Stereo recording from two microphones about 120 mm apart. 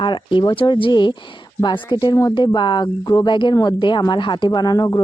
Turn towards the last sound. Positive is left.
turn(degrees=35)  # may be behind; listen again after turning